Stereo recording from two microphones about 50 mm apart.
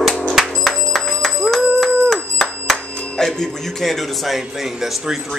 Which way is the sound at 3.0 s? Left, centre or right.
Centre.